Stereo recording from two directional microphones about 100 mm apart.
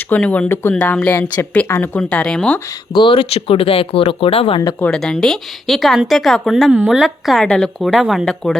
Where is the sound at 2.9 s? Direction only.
60° left (ahead or behind).